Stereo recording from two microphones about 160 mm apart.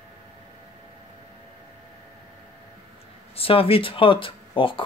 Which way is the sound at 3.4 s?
35° left (ahead or behind).